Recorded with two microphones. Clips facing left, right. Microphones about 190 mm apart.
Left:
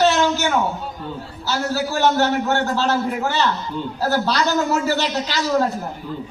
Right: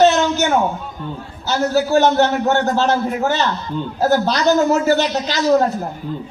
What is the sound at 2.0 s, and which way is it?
Speech, 20° right (ahead or behind).